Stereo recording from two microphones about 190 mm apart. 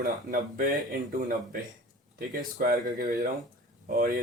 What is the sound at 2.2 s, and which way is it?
Speech, 50° right (ahead or behind).